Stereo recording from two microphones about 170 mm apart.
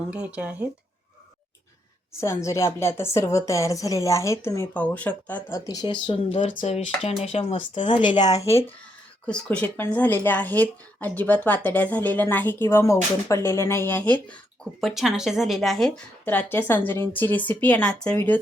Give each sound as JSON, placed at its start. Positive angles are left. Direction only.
{"t": 0.1, "sound": "speech", "side_deg": -5}
{"t": 2.2, "sound": "speech", "side_deg": 15}
{"t": 5.5, "sound": "speech", "side_deg": 20}
{"t": 7.9, "sound": "speech", "side_deg": 30}
{"t": 9.2, "sound": "speech", "side_deg": 5}